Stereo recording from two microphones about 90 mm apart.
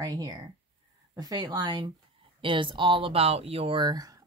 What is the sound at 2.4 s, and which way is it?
Speech, 65° right (ahead or behind).